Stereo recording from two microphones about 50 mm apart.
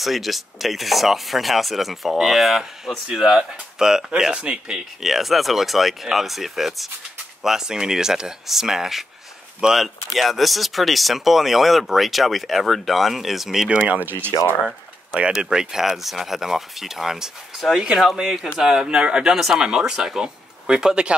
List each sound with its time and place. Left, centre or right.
0.0 s speech: centre
5.0 s speech: centre
10.1 s speech: centre
13.7 s speech: right
15.3 s speech: centre